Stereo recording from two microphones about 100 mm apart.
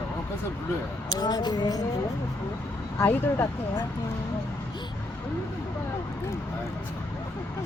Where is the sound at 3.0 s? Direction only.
25° left (ahead or behind).